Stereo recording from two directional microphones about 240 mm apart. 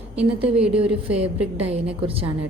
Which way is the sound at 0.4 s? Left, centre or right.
Centre.